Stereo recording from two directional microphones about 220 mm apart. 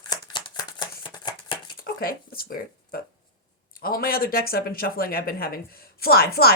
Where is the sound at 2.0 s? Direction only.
40° left (ahead or behind).